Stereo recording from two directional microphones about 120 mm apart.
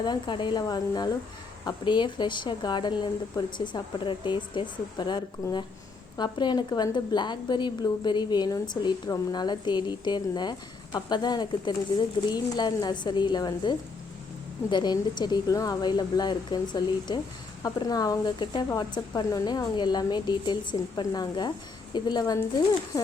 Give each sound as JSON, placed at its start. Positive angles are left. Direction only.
{"t": 0.0, "sound": "a woman's voice", "side_deg": 40}